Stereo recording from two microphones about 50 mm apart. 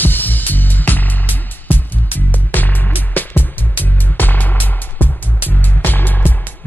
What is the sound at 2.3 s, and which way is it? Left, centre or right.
Music, left.